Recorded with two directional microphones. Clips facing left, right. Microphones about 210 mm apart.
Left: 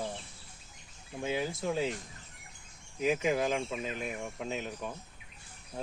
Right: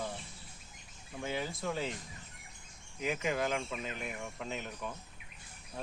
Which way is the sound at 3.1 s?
25° left (ahead or behind).